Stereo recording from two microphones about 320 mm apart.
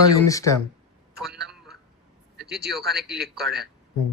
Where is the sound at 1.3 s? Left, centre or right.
Centre.